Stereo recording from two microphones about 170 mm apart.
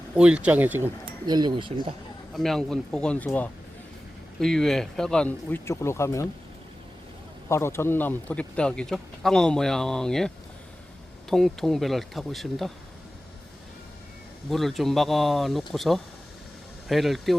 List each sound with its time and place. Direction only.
0.2 s speech: 5° right (ahead or behind)
1.0 s speech: 25° right (ahead or behind)
2.3 s a man's voice: centre (ahead or behind)
7.4 s a man's voice: 15° left (ahead or behind)
14.5 s a man's voice: centre (ahead or behind)